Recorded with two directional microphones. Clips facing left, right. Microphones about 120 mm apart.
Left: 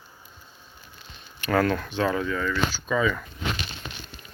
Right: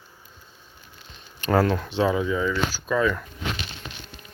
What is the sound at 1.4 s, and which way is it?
Speech, 25° right (ahead or behind).